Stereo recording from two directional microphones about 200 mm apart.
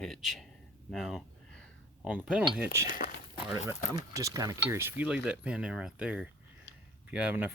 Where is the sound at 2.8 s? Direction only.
45° left (ahead or behind).